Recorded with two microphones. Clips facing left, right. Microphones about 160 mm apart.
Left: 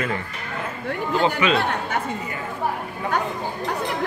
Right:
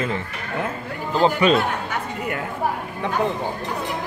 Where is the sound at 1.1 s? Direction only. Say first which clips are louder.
Right 4 dB; 40° right (ahead or behind).